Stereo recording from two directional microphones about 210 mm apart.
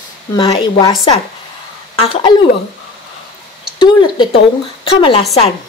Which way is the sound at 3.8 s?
25° left (ahead or behind).